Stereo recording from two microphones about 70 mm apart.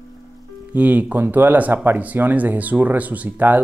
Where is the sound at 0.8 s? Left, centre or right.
Right.